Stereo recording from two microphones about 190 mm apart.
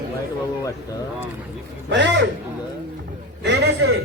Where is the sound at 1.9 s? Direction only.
65° right (ahead or behind).